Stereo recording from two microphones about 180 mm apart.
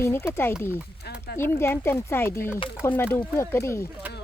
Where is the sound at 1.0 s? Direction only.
60° left (ahead or behind).